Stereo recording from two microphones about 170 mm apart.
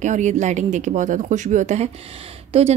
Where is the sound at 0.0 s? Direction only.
45° right (ahead or behind).